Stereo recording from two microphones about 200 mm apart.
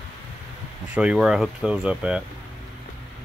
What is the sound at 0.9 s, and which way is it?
Speech, 5° right (ahead or behind).